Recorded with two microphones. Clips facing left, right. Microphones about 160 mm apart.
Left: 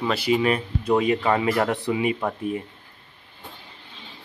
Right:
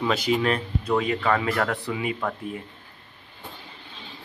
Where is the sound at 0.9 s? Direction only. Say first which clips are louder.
Left 3 dB; 20° left (ahead or behind).